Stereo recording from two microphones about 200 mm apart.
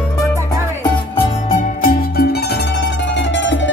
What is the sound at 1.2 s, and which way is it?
Music, 40° left (ahead or behind).